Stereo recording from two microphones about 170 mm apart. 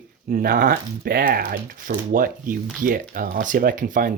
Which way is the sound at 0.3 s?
60° right (ahead or behind).